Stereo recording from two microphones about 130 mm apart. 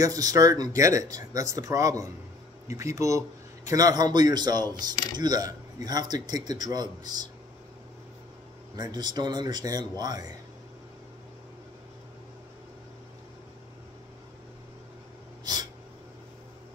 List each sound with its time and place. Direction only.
0.0 s speech: 30° right (ahead or behind)
8.7 s speech: 30° right (ahead or behind)